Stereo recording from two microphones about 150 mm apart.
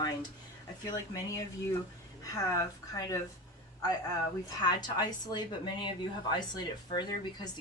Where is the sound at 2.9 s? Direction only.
25° left (ahead or behind).